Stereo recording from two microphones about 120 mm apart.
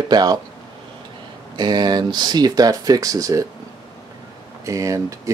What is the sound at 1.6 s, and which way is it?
Speech, 35° right (ahead or behind).